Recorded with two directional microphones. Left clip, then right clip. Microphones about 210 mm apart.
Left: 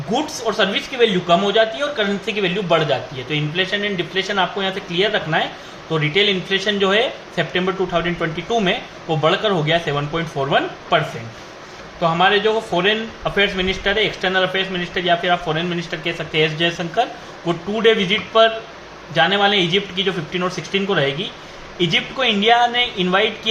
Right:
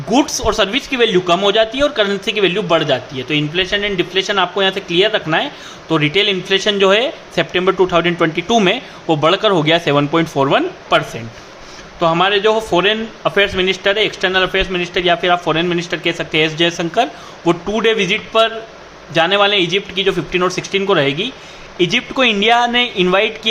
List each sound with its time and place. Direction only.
0.1 s a man's voice: 50° right (ahead or behind)